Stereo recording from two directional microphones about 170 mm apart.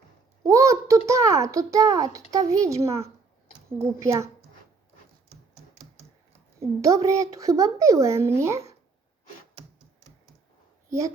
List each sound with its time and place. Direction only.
0.4 s a child's voice: 20° right (ahead or behind)
6.6 s speech: 20° right (ahead or behind)
10.8 s a sound: 20° right (ahead or behind)